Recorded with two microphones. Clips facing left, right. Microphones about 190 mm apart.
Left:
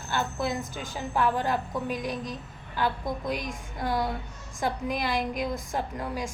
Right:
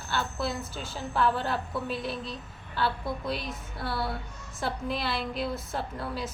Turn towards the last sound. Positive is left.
turn(degrees=15)  # may be behind; listen again after turning